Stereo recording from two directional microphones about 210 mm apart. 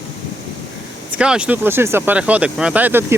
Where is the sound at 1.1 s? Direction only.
5° right (ahead or behind).